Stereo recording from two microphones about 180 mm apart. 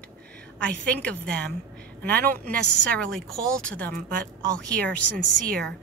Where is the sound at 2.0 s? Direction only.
60° right (ahead or behind).